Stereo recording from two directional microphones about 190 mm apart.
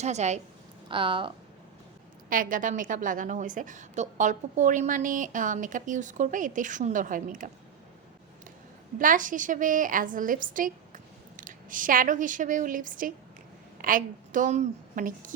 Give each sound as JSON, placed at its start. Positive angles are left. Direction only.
{"t": 0.0, "sound": "a woman's voice", "side_deg": -35}
{"t": 2.3, "sound": "a woman's voice", "side_deg": -45}
{"t": 9.0, "sound": "a woman's voice", "side_deg": -45}